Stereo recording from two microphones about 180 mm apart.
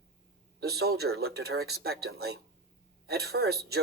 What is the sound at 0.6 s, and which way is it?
Speech, 60° right (ahead or behind).